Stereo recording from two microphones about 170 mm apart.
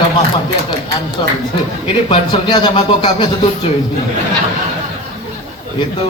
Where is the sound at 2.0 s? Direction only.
25° left (ahead or behind).